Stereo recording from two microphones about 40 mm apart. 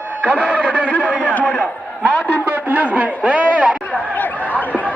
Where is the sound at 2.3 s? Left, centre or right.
Right.